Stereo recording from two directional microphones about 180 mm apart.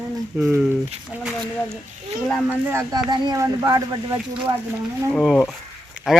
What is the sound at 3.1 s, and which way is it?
Speech, 20° right (ahead or behind).